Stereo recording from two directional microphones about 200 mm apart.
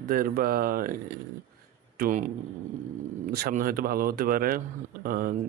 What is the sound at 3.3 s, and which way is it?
Speech, 45° right (ahead or behind).